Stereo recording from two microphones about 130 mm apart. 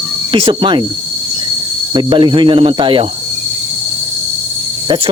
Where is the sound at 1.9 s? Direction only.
35° right (ahead or behind).